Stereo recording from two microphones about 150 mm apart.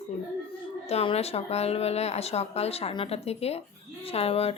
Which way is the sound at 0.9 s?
45° left (ahead or behind).